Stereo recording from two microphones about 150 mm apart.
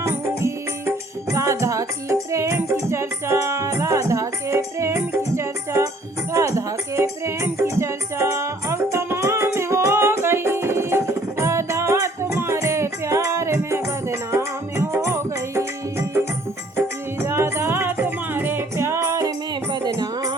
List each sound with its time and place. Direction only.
0.0 s music: 15° right (ahead or behind)